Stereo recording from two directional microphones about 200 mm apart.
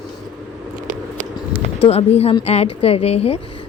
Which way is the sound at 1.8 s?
30° left (ahead or behind).